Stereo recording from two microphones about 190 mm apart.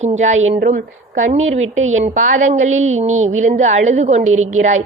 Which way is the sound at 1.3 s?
35° right (ahead or behind).